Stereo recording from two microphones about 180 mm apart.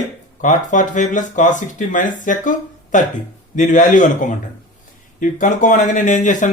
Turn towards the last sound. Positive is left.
turn(degrees=45)  # may be behind; listen again after turning